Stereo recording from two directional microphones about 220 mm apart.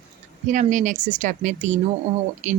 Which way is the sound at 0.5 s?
35° right (ahead or behind).